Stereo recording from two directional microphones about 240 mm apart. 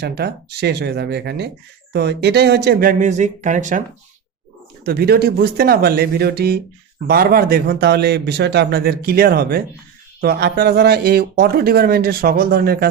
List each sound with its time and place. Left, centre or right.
0.0 s speech: right
4.9 s speech: right